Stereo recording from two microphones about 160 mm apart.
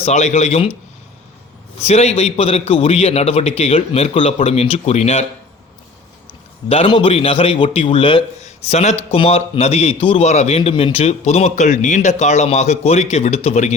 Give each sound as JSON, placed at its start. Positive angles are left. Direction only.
{"t": 0.0, "sound": "speech", "side_deg": 45}
{"t": 1.8, "sound": "a man's voice", "side_deg": 40}
{"t": 6.7, "sound": "a man's voice", "side_deg": 35}